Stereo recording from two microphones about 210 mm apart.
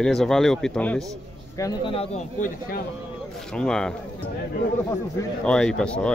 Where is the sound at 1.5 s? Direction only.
15° left (ahead or behind); by 2.8 s 35° left (ahead or behind).